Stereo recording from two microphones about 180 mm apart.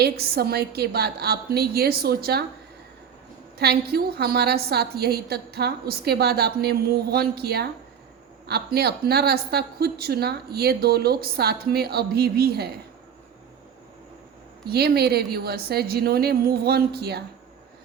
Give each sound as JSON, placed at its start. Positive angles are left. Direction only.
{"t": 0.0, "sound": "a woman's voice", "side_deg": -60}
{"t": 3.6, "sound": "a woman's voice", "side_deg": -60}
{"t": 14.7, "sound": "a woman's voice", "side_deg": -60}